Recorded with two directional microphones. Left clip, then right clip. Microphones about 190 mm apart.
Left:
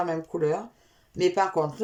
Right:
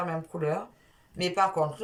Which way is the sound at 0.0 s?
25° left (ahead or behind).